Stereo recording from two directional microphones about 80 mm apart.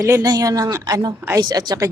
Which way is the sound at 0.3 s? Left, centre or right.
Right.